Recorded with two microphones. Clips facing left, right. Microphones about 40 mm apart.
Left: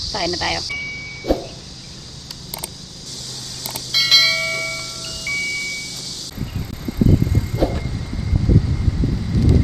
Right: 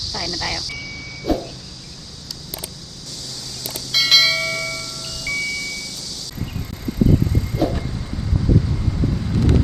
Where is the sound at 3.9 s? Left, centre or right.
Centre.